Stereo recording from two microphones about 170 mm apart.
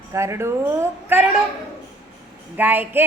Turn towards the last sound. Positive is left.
turn(degrees=-10)  # may be behind; listen again after turning